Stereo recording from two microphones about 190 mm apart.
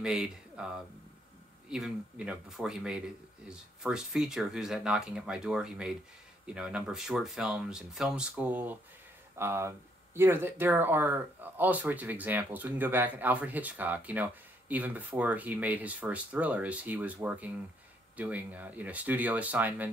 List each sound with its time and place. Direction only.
0.0 s speech: 5° right (ahead or behind)